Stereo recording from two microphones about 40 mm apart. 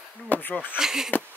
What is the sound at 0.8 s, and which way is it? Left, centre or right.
Speech, centre.